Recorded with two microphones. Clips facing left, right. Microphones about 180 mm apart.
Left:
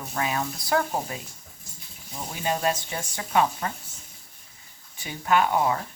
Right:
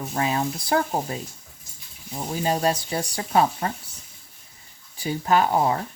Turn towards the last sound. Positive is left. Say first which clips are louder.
# right 2 dB
turn(degrees=-35)  # may be behind; listen again after turning